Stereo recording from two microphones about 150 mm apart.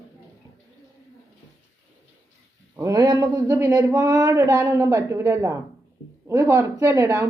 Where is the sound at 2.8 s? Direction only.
25° right (ahead or behind).